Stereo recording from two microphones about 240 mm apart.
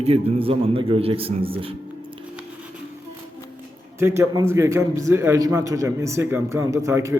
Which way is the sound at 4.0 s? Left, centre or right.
Centre.